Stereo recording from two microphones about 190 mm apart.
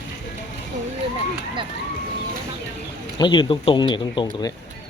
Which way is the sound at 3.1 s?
25° left (ahead or behind).